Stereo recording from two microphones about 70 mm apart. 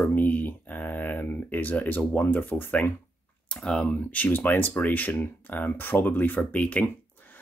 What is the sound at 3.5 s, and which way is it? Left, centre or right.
Speech, centre.